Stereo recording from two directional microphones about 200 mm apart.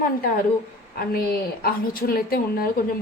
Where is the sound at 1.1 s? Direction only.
50° left (ahead or behind).